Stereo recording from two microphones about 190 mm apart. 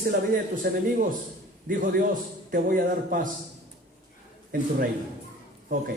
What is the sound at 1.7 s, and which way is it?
Speech, 50° right (ahead or behind).